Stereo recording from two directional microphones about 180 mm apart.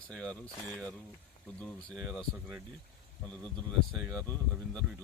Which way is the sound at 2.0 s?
5° right (ahead or behind).